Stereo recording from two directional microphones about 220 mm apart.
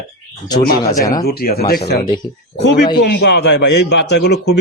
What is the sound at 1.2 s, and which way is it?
Speech, 45° left (ahead or behind).